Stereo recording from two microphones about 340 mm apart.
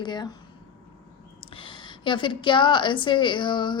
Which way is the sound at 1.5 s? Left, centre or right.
Centre.